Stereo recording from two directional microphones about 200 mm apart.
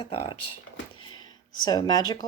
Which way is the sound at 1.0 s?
20° left (ahead or behind).